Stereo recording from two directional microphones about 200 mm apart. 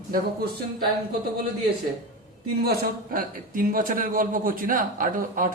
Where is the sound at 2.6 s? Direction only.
45° right (ahead or behind).